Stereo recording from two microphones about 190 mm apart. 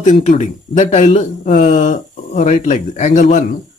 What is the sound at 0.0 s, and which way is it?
Speech, 40° left (ahead or behind).